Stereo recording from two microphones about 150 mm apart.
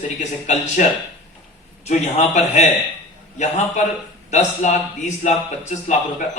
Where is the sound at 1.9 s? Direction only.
50° left (ahead or behind).